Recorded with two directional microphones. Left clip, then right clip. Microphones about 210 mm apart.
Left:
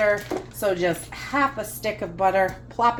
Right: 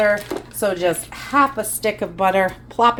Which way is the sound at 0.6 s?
45° right (ahead or behind).